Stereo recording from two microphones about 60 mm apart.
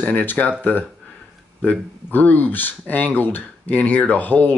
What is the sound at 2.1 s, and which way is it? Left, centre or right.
Speech, left.